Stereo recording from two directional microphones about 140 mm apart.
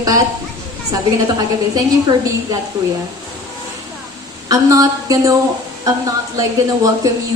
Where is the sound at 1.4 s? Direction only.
25° right (ahead or behind).